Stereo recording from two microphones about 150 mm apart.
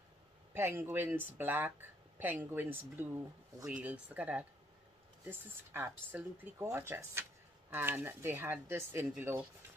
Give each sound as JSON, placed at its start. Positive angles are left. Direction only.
{"t": 0.6, "sound": "speech", "side_deg": -15}